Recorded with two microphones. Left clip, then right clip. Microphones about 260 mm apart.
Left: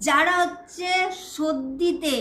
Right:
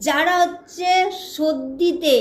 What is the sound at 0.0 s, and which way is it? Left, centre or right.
A woman's voice, centre.